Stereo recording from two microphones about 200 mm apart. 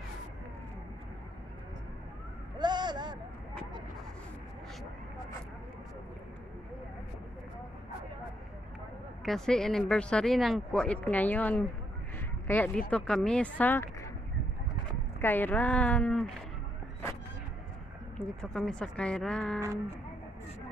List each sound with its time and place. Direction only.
2.6 s a sound: 20° right (ahead or behind)
9.2 s speech: centre (ahead or behind)
15.1 s speech: 10° left (ahead or behind)
18.1 s speech: 5° left (ahead or behind)